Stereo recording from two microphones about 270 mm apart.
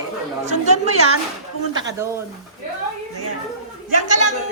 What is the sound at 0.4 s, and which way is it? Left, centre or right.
Speech, right.